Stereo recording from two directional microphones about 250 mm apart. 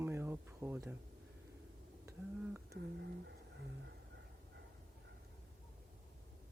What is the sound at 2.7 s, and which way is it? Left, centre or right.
Speech, right.